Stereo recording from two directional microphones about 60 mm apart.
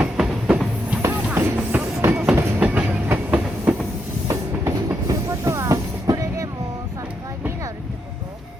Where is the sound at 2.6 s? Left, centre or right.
Right.